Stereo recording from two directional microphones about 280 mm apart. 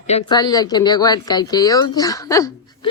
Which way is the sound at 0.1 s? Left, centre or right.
Centre.